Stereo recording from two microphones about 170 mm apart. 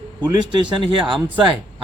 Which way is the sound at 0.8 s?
30° right (ahead or behind).